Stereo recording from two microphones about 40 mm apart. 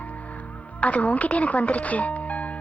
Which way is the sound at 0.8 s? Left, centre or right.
Left.